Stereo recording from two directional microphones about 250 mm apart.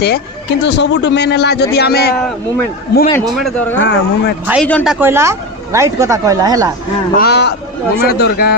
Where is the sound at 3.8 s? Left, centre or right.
Left.